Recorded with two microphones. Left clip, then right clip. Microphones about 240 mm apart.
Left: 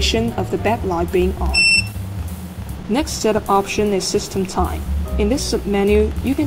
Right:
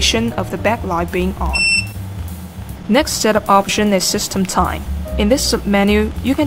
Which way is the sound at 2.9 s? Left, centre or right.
Right.